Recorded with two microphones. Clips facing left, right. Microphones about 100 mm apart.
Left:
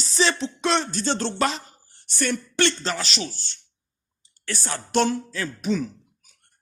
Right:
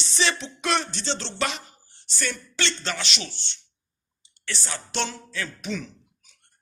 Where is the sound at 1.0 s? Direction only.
50° left (ahead or behind).